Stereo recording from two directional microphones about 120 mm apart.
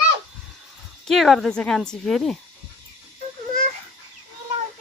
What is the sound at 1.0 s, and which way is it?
A woman's voice, centre (ahead or behind).